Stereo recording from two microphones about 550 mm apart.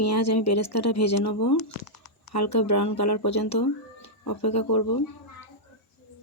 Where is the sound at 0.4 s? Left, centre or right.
Left.